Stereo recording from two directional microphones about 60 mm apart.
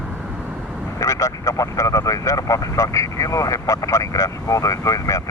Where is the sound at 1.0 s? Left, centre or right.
Left.